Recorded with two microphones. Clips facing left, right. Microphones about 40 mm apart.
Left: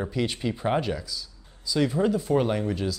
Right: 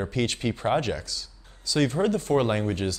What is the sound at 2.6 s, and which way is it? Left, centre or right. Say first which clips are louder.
Speech: right 1 dB; right.